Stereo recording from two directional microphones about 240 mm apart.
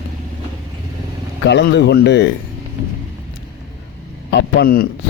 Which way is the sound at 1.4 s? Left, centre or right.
Left.